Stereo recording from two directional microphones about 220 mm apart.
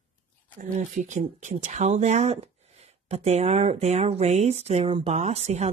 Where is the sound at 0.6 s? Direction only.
35° right (ahead or behind).